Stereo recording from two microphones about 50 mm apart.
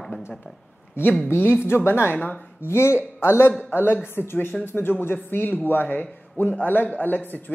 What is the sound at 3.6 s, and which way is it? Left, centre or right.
A man's voice, left.